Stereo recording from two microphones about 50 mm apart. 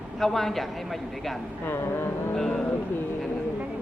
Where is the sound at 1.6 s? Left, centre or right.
Left.